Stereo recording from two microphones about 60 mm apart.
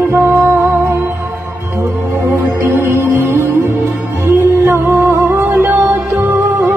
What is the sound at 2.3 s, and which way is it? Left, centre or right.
Music, right.